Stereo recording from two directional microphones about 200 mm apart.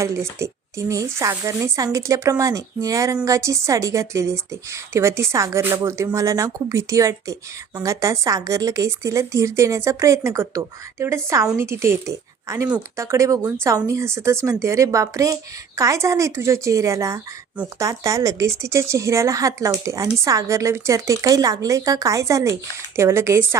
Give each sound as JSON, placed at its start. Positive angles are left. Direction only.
{"t": 0.0, "sound": "speech", "side_deg": -15}